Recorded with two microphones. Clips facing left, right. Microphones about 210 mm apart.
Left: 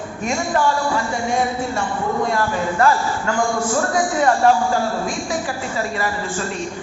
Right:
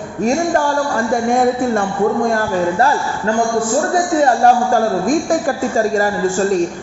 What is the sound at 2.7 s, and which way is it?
Speech, 30° right (ahead or behind).